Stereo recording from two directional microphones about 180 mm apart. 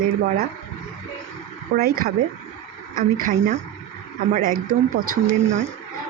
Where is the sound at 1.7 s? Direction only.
55° right (ahead or behind).